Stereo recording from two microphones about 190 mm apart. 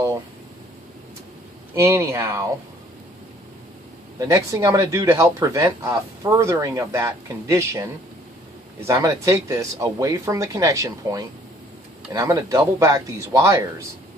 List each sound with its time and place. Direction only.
1.7 s speech: 15° right (ahead or behind)
4.2 s speech: 15° right (ahead or behind)
8.9 s speech: 15° right (ahead or behind)